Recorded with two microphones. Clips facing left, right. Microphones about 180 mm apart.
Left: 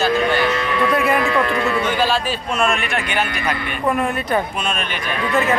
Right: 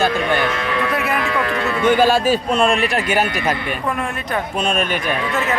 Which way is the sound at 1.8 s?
50° right (ahead or behind).